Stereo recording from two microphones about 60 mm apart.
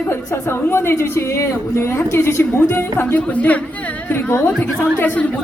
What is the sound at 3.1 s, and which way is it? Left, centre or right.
A woman's voice, left.